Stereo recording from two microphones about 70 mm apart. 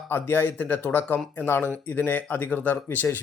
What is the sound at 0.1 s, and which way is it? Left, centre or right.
Speech, left.